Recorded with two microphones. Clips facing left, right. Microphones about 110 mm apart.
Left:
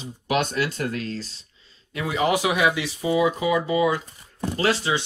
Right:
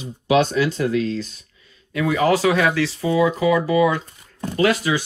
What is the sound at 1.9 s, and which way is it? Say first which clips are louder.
Speech: right 5 dB; 20° left (ahead or behind).